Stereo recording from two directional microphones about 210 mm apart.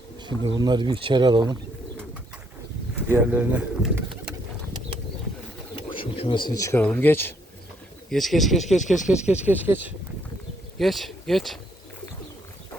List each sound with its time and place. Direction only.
0.2 s speech: 20° right (ahead or behind)
2.9 s speech: 10° right (ahead or behind)
5.7 s speech: 25° left (ahead or behind); by 11.6 s centre (ahead or behind)